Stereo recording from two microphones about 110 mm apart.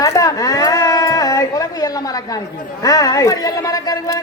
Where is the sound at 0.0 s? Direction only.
35° left (ahead or behind).